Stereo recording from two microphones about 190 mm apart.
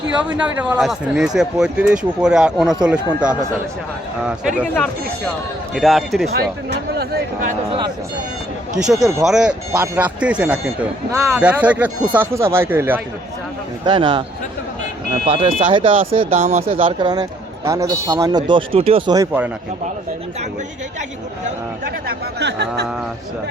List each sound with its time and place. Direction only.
0.6 s speech: 5° right (ahead or behind)
4.6 s speech: 10° left (ahead or behind)
6.3 s speech: 55° right (ahead or behind)
8.7 s speech: 5° right (ahead or behind)
13.8 s a man's voice: 25° right (ahead or behind)
22.0 s speech: 65° right (ahead or behind)